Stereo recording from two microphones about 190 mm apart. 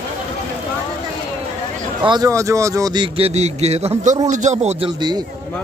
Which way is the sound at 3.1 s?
35° right (ahead or behind).